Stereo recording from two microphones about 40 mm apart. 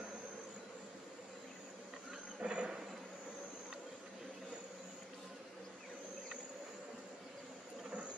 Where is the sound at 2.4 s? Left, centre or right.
Right.